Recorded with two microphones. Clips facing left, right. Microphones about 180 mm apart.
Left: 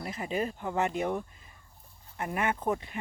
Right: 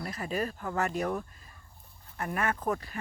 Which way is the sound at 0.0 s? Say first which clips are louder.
Left 1 dB; 20° left (ahead or behind).